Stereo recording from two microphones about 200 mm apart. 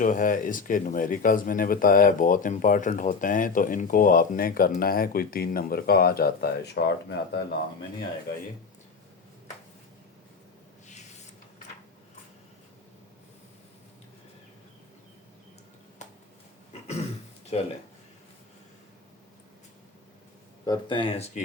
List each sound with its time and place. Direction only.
0.0 s speech: 40° left (ahead or behind)
16.0 s a sound: 35° left (ahead or behind)
17.5 s speech: 30° left (ahead or behind)
20.7 s speech: 25° left (ahead or behind)